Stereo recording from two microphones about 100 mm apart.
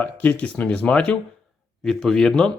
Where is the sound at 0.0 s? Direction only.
15° left (ahead or behind).